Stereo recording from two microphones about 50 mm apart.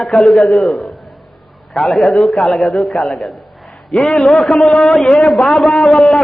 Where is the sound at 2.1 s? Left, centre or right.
Centre.